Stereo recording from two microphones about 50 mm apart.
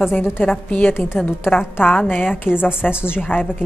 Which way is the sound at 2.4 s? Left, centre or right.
Left.